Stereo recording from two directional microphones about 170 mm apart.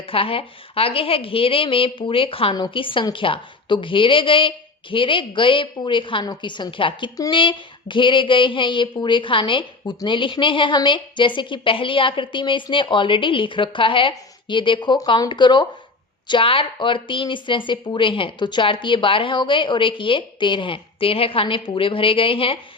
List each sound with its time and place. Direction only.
0.1 s a woman's voice: 35° left (ahead or behind)